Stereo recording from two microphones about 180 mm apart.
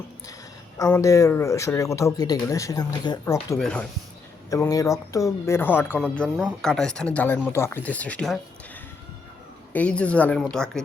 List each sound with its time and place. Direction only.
0.8 s speech: 15° left (ahead or behind)
3.6 s speech: 5° left (ahead or behind)
4.4 s speech: 20° left (ahead or behind)